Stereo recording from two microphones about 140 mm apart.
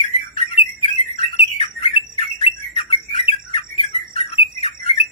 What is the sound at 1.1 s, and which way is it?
Bird, 45° left (ahead or behind).